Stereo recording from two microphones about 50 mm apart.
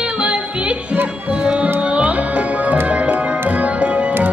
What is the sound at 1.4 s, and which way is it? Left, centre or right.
Music, centre.